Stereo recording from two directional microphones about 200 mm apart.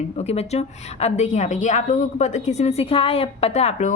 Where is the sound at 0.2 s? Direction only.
30° left (ahead or behind).